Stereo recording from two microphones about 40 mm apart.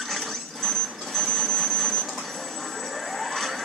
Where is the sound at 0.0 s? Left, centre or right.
Centre.